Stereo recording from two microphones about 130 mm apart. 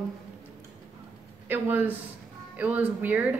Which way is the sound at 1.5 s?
15° right (ahead or behind).